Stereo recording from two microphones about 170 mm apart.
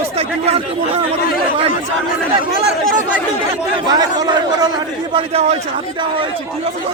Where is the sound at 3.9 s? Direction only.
25° right (ahead or behind).